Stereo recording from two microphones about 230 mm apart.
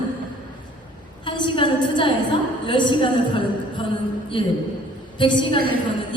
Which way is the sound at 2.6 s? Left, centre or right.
Left.